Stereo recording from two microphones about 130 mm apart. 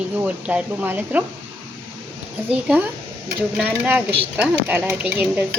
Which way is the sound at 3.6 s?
15° right (ahead or behind).